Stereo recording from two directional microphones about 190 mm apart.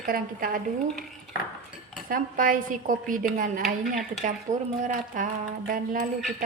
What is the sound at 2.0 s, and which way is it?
A woman's voice, 45° right (ahead or behind).